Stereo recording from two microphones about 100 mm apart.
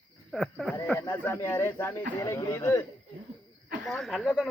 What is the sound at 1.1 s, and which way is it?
Speech, 25° left (ahead or behind).